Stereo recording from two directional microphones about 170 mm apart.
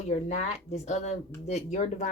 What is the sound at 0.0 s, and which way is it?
Speech, 40° left (ahead or behind).